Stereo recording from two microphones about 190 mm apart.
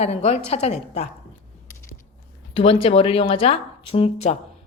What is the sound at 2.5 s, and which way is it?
Speech, 30° left (ahead or behind).